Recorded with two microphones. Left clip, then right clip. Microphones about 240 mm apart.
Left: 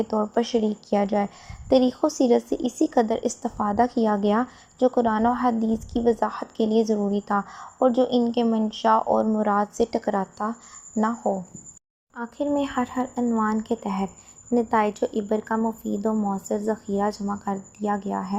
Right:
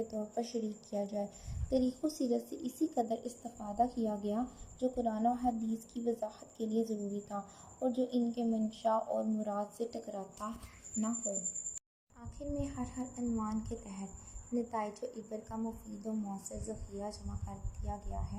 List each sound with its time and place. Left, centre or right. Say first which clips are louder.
0.1 s a woman's voice: left 16 dB; left
12.1 s a woman's voice: left 17 dB; left